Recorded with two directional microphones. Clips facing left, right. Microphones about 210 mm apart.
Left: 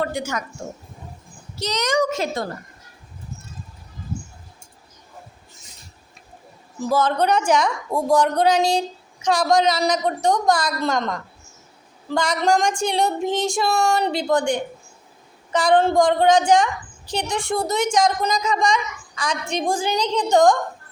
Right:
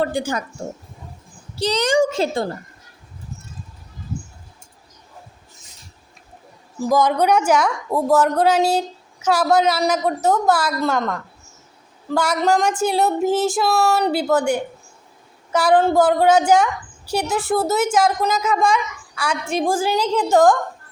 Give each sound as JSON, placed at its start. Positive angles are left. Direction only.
{"t": 0.0, "sound": "a woman's voice", "side_deg": -30}
{"t": 1.5, "sound": "a woman's voice", "side_deg": -30}
{"t": 6.7, "sound": "a woman's voice", "side_deg": -15}